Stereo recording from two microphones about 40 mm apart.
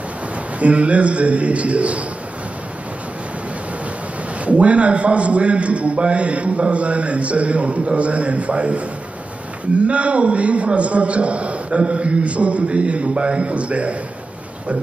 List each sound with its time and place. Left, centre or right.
0.6 s a man's voice: right
4.5 s a man's voice: right
9.8 s a man's voice: right